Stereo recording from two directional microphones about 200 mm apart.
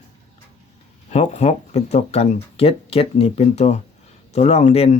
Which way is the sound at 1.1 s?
35° left (ahead or behind).